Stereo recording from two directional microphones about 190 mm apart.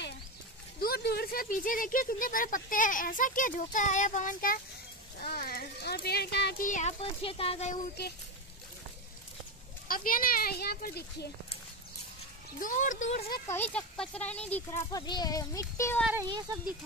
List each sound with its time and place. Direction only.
0.7 s a child's voice: 55° left (ahead or behind)
6.7 s speech: 35° left (ahead or behind)
9.8 s speech: 50° left (ahead or behind)
12.5 s speech: 45° left (ahead or behind)
13.3 s speech: 10° left (ahead or behind)